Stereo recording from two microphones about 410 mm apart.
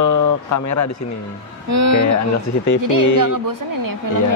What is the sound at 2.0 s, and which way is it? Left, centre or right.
Speech, left.